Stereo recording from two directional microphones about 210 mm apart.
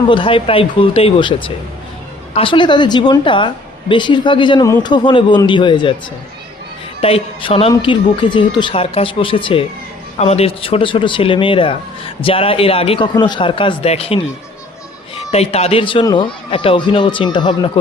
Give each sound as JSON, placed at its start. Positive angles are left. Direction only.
{"t": 0.1, "sound": "speech", "side_deg": 25}
{"t": 7.0, "sound": "speech", "side_deg": 25}